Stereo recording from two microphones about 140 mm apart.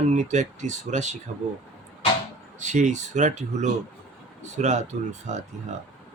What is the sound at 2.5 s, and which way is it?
Speech, 60° right (ahead or behind).